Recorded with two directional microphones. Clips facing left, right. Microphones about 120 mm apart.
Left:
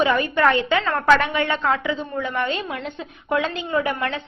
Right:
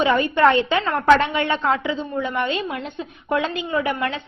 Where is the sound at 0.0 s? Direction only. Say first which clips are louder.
Right 2 dB; 25° right (ahead or behind).